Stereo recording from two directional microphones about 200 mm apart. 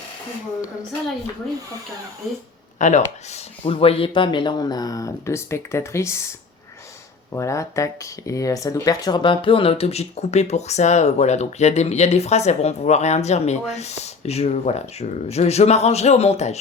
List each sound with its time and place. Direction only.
2.7 s speech: 35° left (ahead or behind); by 6.2 s 15° left (ahead or behind)
7.3 s speech: 15° left (ahead or behind); by 16.6 s 30° left (ahead or behind)